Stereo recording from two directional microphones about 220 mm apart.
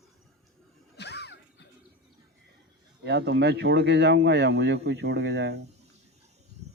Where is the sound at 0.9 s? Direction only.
50° left (ahead or behind).